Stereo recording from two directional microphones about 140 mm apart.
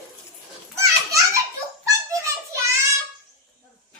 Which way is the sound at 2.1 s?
25° right (ahead or behind).